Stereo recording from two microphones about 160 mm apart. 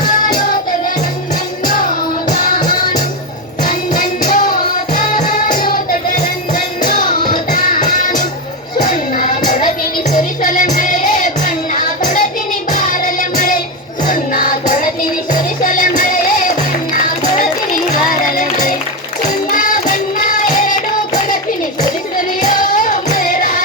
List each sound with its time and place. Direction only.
1.6 s music: 55° left (ahead or behind)
7.3 s music: 55° left (ahead or behind)
18.3 s music: 55° left (ahead or behind)
22.4 s music: 55° left (ahead or behind)